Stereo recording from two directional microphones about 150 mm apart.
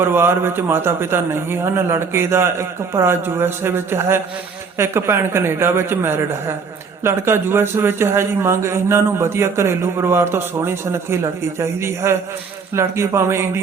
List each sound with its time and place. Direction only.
0.0 s a man's voice: 15° right (ahead or behind)